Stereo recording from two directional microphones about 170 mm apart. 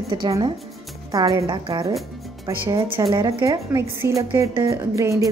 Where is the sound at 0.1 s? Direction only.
20° right (ahead or behind).